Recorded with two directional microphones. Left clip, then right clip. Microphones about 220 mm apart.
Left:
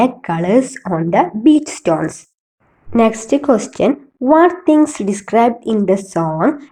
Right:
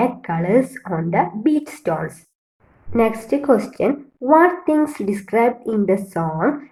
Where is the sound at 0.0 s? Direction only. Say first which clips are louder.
Left 5 dB; 35° left (ahead or behind).